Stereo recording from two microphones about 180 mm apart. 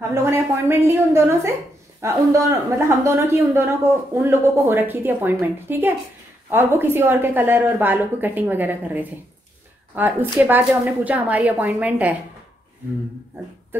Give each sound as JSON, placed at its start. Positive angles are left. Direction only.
{"t": 0.1, "sound": "a woman's voice", "side_deg": -15}